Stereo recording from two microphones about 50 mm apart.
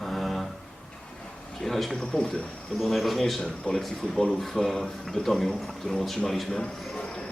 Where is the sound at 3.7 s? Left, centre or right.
Left.